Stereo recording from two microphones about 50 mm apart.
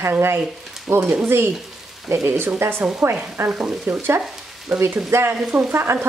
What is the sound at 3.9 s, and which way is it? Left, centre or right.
Speech, right.